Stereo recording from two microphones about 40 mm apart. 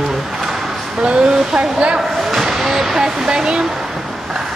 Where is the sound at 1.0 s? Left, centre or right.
Right.